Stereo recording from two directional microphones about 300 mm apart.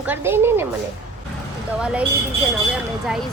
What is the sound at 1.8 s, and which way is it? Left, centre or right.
Speech, centre.